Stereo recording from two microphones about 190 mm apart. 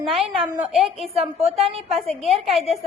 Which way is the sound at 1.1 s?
35° right (ahead or behind).